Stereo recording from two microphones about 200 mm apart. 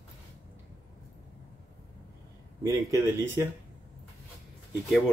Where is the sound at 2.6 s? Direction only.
15° right (ahead or behind).